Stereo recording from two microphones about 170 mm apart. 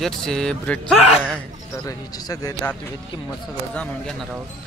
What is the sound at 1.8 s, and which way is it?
Speech, 20° left (ahead or behind).